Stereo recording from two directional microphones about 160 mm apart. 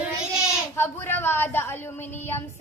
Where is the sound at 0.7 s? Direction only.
15° left (ahead or behind).